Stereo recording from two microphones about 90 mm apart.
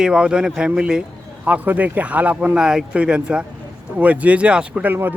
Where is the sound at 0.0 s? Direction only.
10° right (ahead or behind).